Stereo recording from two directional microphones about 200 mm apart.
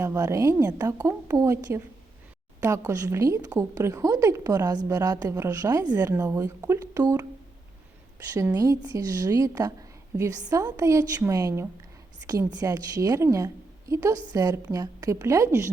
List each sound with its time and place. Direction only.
0.0 s a woman's voice: 15° right (ahead or behind)